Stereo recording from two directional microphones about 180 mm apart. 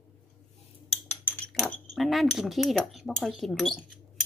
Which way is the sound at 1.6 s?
5° left (ahead or behind).